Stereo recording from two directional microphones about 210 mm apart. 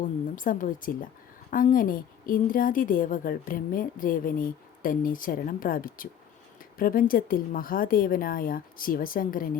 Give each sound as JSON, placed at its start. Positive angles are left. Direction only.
{"t": 0.0, "sound": "a woman's voice", "side_deg": 40}